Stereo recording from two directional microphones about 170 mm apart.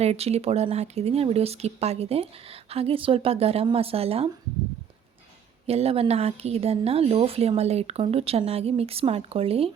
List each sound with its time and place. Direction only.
0.0 s speech: 40° right (ahead or behind)
5.6 s speech: 35° right (ahead or behind)